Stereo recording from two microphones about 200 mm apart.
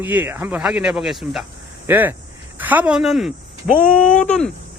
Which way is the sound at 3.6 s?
45° left (ahead or behind).